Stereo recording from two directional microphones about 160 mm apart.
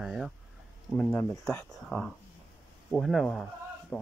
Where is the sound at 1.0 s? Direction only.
10° left (ahead or behind).